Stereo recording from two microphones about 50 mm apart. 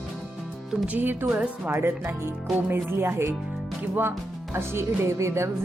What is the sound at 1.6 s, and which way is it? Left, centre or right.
Speech, right.